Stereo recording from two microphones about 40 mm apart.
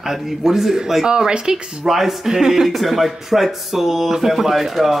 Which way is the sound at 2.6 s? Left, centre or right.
Centre.